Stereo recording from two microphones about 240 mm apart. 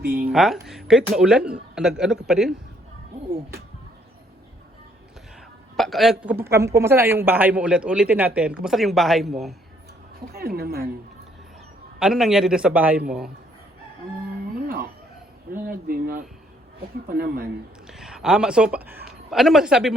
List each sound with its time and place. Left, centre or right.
0.0 s a woman's voice: right
0.3 s speech: centre
5.7 s a woman's voice: centre
10.3 s a woman's voice: right
11.9 s speech: centre
15.6 s a woman's voice: right
17.8 s speech: centre